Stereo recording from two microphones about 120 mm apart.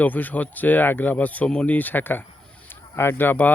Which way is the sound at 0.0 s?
15° left (ahead or behind).